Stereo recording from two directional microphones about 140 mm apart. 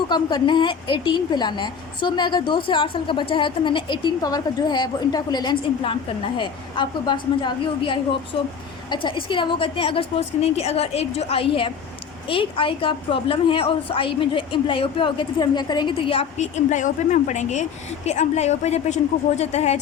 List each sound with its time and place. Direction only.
0.1 s a woman's voice: 30° left (ahead or behind)
16.4 s a woman's voice: 60° left (ahead or behind)